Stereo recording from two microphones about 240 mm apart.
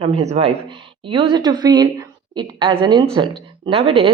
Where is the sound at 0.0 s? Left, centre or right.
Right.